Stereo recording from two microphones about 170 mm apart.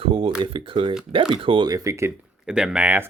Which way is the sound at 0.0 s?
35° right (ahead or behind).